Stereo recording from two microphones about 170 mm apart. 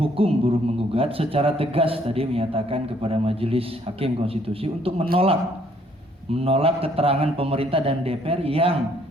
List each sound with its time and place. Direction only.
0.0 s a man's voice: 35° right (ahead or behind)
6.4 s a man's voice: 35° right (ahead or behind)